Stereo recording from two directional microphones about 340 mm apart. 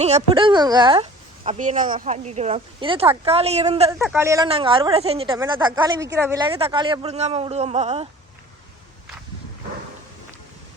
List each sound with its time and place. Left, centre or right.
0.0 s speech: centre
3.9 s speech: centre